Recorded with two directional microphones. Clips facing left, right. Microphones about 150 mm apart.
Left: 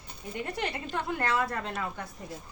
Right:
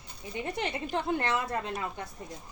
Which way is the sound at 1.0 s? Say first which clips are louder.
Left 3 dB; 25° right (ahead or behind).